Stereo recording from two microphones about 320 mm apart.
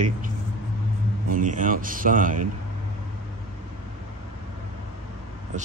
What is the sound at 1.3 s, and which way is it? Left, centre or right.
Speech, right.